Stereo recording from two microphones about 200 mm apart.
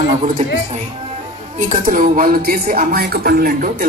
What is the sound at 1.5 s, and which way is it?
Speech, 40° right (ahead or behind).